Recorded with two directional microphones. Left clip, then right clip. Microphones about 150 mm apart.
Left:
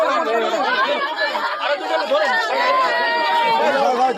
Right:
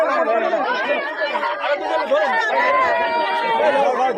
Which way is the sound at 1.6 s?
5° left (ahead or behind).